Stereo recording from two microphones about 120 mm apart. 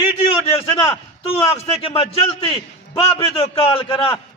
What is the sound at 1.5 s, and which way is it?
A man's voice, 50° left (ahead or behind).